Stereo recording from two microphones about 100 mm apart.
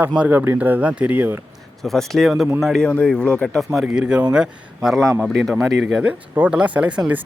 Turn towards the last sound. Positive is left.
turn(degrees=-10)  # may be behind; listen again after turning